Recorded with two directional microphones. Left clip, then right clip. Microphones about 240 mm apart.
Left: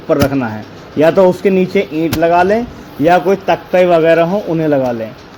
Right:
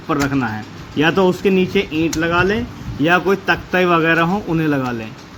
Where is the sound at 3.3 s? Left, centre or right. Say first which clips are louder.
Left 4 dB; centre.